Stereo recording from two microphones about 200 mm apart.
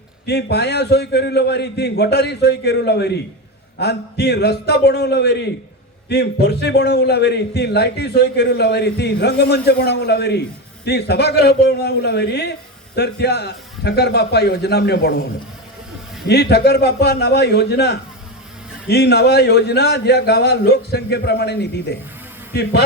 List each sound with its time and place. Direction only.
0.3 s a man's voice: 55° left (ahead or behind)